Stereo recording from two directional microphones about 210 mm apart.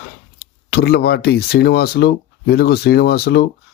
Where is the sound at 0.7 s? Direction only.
50° left (ahead or behind).